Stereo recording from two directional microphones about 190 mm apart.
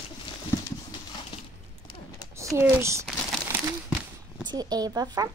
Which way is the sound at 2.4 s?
15° right (ahead or behind).